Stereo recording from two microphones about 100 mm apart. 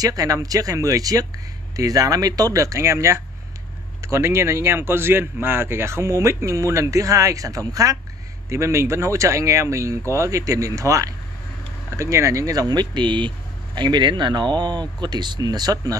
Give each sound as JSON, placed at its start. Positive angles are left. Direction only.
{"t": 0.0, "sound": "speech", "side_deg": -35}